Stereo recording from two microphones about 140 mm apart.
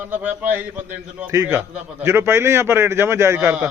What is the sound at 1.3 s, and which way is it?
A man's voice, 25° right (ahead or behind).